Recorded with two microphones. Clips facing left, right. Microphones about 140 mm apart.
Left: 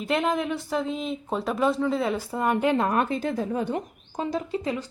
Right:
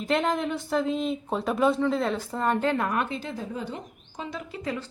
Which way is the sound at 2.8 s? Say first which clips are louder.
Left 4 dB; 35° left (ahead or behind).